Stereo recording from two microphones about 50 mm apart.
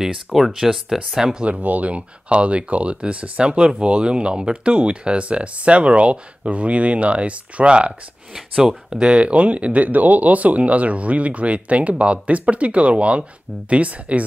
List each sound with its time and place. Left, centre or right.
0.0 s speech: centre
1.4 s speech: right
8.6 s speech: centre
9.1 s speech: right